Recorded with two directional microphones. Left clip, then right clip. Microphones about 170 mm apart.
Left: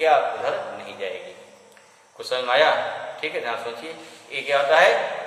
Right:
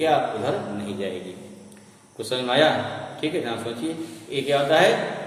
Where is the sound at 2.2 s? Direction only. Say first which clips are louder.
Left 1 dB; 20° right (ahead or behind).